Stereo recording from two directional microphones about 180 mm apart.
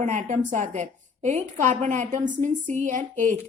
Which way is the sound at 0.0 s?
45° right (ahead or behind).